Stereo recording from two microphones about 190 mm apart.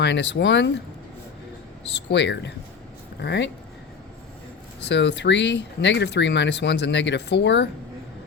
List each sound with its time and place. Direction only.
0.0 s speech: 65° left (ahead or behind)
2.0 s speech: 65° left (ahead or behind)
4.8 s speech: 65° left (ahead or behind)